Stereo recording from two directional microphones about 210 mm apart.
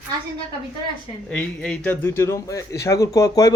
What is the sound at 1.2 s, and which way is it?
A man's voice, 5° left (ahead or behind).